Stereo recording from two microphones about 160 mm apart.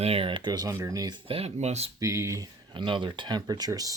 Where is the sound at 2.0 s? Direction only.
20° right (ahead or behind).